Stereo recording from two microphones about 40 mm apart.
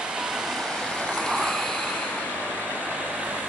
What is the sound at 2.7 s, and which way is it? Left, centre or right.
Vehicle, right.